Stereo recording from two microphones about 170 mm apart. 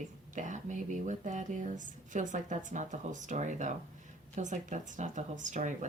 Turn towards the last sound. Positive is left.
turn(degrees=-45)  # may be behind; listen again after turning